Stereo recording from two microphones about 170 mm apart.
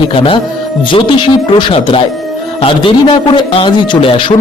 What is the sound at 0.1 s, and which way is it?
A man's voice, 30° left (ahead or behind).